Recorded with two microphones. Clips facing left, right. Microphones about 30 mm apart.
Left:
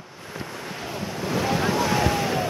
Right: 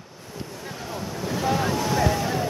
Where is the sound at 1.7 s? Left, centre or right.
Left.